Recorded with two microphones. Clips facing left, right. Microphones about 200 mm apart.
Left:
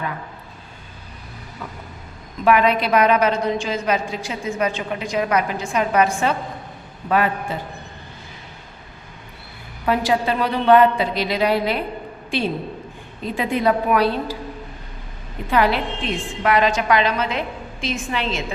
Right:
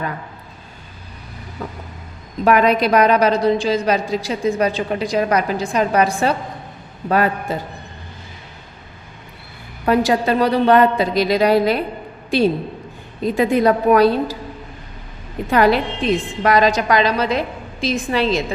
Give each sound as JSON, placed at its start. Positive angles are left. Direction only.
{"t": 2.4, "sound": "a woman's voice", "side_deg": -40}
{"t": 9.8, "sound": "a woman's voice", "side_deg": -45}
{"t": 13.2, "sound": "a woman's voice", "side_deg": -40}
{"t": 15.4, "sound": "a woman's voice", "side_deg": -45}